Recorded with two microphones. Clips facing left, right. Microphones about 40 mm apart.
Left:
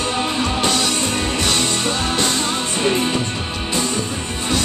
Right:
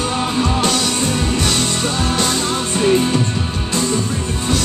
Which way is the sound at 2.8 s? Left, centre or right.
Centre.